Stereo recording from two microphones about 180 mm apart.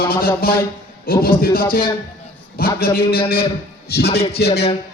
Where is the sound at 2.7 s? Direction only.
55° left (ahead or behind).